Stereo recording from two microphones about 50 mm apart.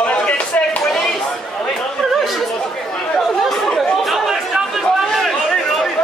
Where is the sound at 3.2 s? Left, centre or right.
Centre.